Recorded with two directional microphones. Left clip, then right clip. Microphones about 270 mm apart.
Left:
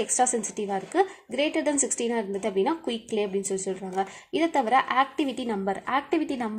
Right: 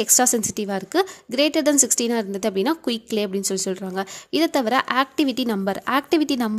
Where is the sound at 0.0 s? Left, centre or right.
Right.